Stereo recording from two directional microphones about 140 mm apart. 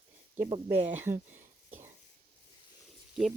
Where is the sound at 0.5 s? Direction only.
55° right (ahead or behind).